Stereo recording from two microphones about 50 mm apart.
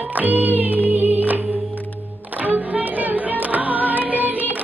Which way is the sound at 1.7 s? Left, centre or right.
Left.